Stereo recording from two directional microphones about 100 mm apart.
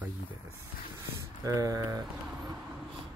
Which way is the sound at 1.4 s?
35° right (ahead or behind).